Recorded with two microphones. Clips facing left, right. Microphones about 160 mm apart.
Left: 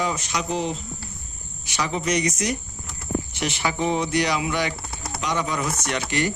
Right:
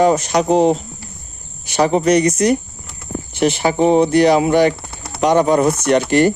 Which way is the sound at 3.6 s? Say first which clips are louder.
Right 10 dB; 40° right (ahead or behind).